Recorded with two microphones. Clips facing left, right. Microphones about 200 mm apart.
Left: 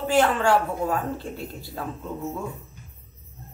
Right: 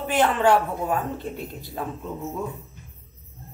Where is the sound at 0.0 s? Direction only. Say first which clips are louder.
Even; 20° right (ahead or behind).